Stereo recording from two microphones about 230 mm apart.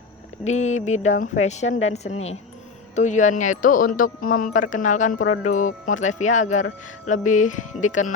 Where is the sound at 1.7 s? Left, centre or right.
Left.